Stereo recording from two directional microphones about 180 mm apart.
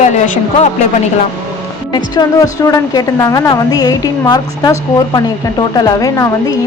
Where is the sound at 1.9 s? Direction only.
20° left (ahead or behind).